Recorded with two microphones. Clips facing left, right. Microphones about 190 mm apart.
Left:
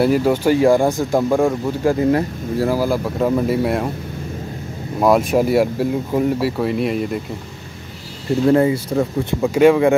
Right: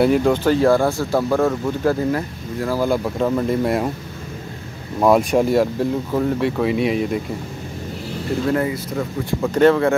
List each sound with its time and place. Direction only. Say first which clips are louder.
0.0 s speech: even; 5° left (ahead or behind)
2.0 s speech: left 5 dB; 25° left (ahead or behind)
2.7 s speech: left 1 dB; 5° left (ahead or behind)
5.0 s speech: even; 5° left (ahead or behind)
8.5 s speech: left 7 dB; 25° left (ahead or behind)
9.4 s speech: left 2 dB; 10° left (ahead or behind)